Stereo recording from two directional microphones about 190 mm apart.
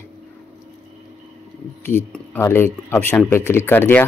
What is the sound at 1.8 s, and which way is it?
Speech, 10° left (ahead or behind).